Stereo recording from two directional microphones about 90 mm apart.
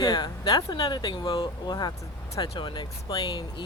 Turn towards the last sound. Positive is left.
turn(degrees=55)  # may be behind; listen again after turning